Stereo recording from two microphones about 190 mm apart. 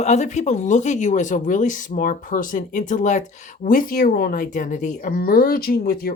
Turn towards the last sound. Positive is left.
turn(degrees=50)  # may be behind; listen again after turning